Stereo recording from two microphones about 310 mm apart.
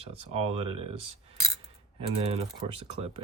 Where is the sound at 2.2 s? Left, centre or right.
Centre.